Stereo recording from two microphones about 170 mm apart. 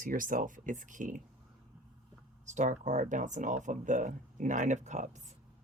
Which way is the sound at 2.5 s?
45° right (ahead or behind).